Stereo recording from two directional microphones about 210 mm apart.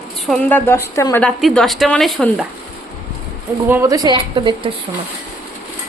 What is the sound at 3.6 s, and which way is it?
A woman's voice, 10° right (ahead or behind).